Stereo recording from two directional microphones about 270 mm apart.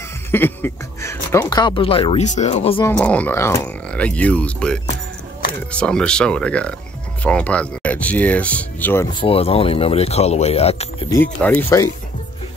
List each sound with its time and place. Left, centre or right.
0.3 s speech: centre; by 2.8 s left
2.8 s speech: centre; by 11.1 s left
11.4 s speech: centre